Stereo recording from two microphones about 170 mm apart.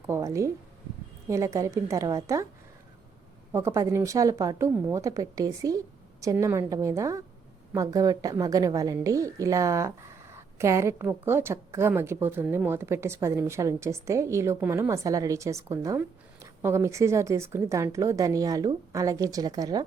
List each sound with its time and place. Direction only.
0.1 s a woman's voice: 20° right (ahead or behind)
3.5 s a woman's voice: 15° right (ahead or behind)